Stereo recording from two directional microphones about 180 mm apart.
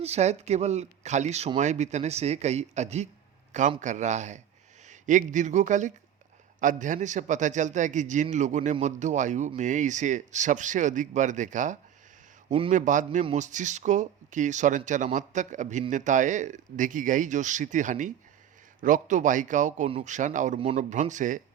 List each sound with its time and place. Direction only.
0.0 s a man's voice: 35° right (ahead or behind)
12.5 s a man's voice: 30° right (ahead or behind)
12.7 s a man's voice: 45° right (ahead or behind)